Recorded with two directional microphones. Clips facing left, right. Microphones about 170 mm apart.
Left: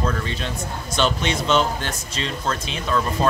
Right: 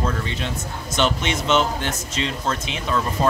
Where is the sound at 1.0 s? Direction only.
20° right (ahead or behind).